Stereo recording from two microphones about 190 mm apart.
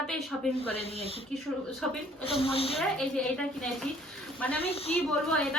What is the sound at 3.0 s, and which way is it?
A woman's voice, 5° left (ahead or behind).